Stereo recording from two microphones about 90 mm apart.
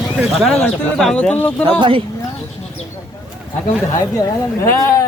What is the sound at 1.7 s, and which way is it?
Speech, 75° right (ahead or behind).